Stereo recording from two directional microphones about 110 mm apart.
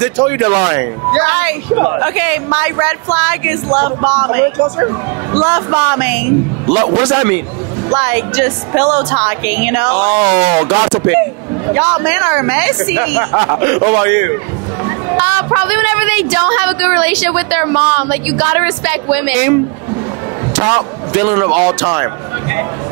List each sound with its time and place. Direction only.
0.0 s speech: 20° right (ahead or behind)